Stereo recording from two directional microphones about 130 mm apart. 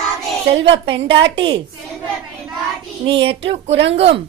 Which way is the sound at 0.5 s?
45° right (ahead or behind).